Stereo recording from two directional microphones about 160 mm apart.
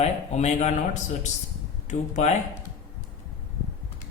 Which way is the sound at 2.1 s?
45° left (ahead or behind).